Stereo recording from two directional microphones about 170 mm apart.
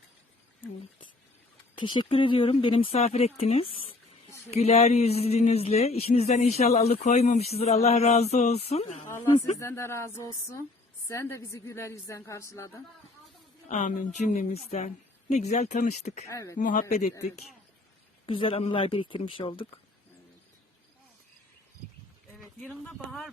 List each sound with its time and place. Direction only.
1.8 s a woman's voice: 25° left (ahead or behind)
9.0 s a woman's voice: 15° left (ahead or behind)
13.7 s a woman's voice: 45° left (ahead or behind)
16.2 s speech: 20° left (ahead or behind)
16.6 s speech: 50° left (ahead or behind)
18.3 s a woman's voice: 30° left (ahead or behind)
22.4 s speech: centre (ahead or behind)